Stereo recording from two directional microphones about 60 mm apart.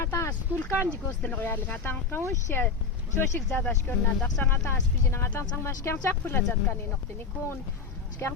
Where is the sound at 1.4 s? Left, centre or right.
Left.